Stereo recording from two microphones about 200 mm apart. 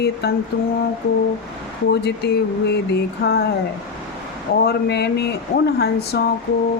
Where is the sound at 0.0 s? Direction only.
55° left (ahead or behind).